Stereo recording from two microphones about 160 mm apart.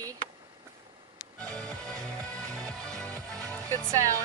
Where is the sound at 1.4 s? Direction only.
5° left (ahead or behind).